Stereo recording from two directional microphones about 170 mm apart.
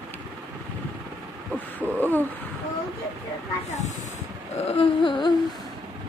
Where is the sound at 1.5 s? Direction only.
10° right (ahead or behind).